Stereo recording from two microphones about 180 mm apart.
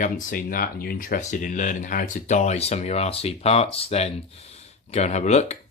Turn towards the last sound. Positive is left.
turn(degrees=35)  # may be behind; listen again after turning